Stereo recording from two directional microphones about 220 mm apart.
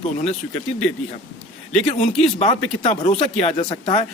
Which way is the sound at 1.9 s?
30° left (ahead or behind).